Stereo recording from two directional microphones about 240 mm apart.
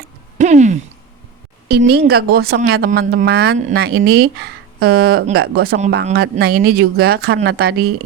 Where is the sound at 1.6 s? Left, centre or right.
Right.